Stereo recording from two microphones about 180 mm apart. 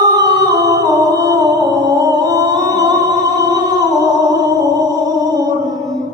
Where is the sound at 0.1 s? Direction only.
20° right (ahead or behind).